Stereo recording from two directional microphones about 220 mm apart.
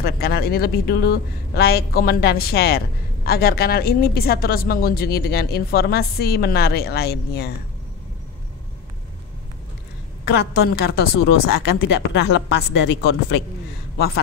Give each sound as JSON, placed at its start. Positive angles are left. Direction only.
{"t": 0.0, "sound": "a woman's voice", "side_deg": 45}
{"t": 10.5, "sound": "a woman's voice", "side_deg": 45}